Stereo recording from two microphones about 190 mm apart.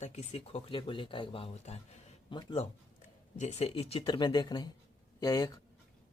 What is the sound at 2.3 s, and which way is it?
Speech, 25° left (ahead or behind).